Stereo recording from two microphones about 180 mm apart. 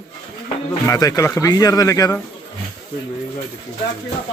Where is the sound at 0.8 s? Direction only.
20° left (ahead or behind).